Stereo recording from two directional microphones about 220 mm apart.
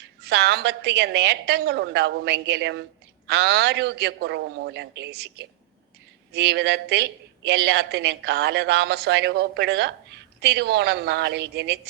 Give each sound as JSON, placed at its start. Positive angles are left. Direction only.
{"t": 0.0, "sound": "a woman's voice", "side_deg": -50}